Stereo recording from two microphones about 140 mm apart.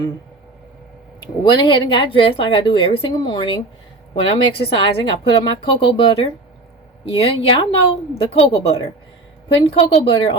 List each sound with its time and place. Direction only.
1.5 s a woman's voice: 35° left (ahead or behind)